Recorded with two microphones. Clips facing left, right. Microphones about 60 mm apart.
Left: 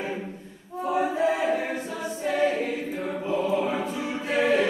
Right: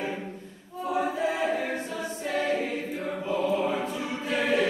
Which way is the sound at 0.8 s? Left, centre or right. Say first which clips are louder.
Left 3 dB; centre.